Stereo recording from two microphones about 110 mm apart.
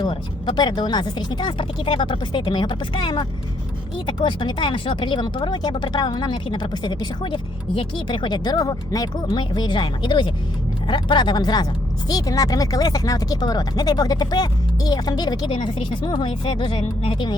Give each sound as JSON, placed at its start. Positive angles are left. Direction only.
{"t": 0.0, "sound": "speech", "side_deg": 50}
{"t": 9.2, "sound": "speech", "side_deg": 45}